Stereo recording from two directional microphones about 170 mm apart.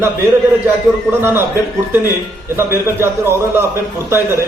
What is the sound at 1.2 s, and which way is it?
Speech, 15° right (ahead or behind).